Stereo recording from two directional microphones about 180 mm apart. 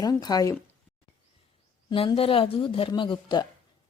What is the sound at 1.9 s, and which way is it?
A woman's voice, 30° left (ahead or behind).